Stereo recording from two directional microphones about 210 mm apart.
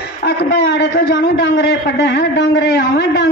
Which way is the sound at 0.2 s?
55° left (ahead or behind).